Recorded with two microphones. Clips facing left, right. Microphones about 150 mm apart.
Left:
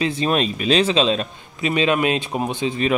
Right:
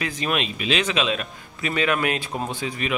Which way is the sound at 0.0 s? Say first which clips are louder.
Left 6 dB; 35° left (ahead or behind).